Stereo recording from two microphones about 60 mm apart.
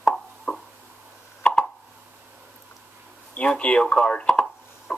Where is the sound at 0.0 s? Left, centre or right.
Centre.